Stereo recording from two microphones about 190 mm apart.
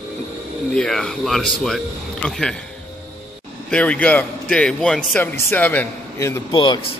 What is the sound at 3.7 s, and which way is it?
A man's voice, 5° left (ahead or behind).